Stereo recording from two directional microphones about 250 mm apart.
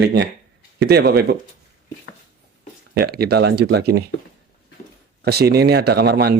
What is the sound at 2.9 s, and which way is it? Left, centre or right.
Speech, right.